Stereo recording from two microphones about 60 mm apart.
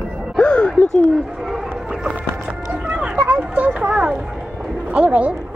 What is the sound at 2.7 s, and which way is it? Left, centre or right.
Music, right.